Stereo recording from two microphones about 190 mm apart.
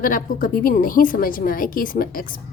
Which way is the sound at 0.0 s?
45° left (ahead or behind).